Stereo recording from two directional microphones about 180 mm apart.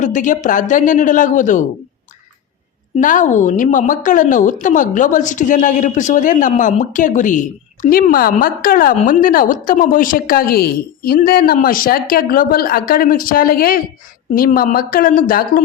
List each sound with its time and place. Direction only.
0.0 s a woman's voice: 45° left (ahead or behind)
2.9 s a woman's voice: 45° left (ahead or behind)